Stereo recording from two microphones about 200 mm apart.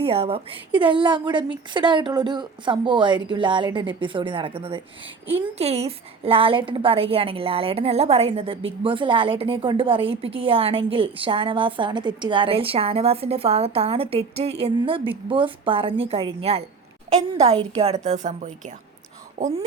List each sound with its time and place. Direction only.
0.0 s a woman's voice: 30° right (ahead or behind)